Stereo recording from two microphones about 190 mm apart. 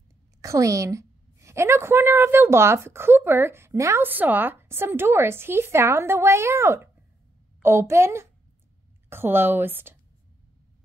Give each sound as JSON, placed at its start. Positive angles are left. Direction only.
{"t": 0.4, "sound": "a woman's voice", "side_deg": -15}